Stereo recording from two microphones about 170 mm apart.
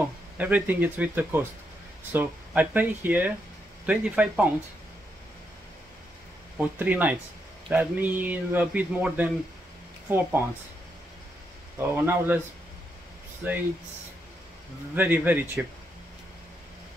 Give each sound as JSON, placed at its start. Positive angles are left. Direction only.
{"t": 0.4, "sound": "speech", "side_deg": -10}
{"t": 6.6, "sound": "speech", "side_deg": -10}
{"t": 11.8, "sound": "speech", "side_deg": -15}
{"t": 15.0, "sound": "speech", "side_deg": -10}